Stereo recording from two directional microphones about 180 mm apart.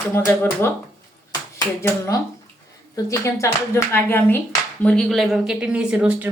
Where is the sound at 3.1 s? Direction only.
15° left (ahead or behind).